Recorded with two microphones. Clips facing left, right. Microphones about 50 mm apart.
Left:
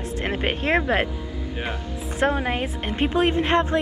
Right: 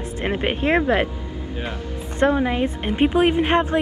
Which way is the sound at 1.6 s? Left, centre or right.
Centre.